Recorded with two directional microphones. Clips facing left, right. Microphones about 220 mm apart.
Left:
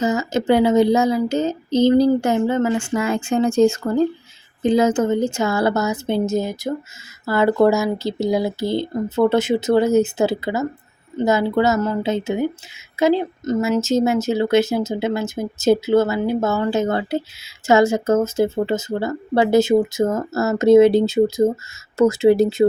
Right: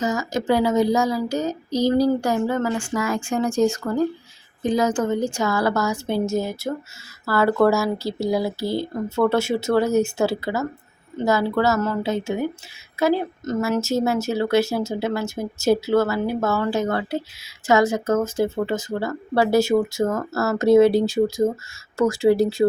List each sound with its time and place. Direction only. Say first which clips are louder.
0.0 s speech: left 4 dB; 25° left (ahead or behind)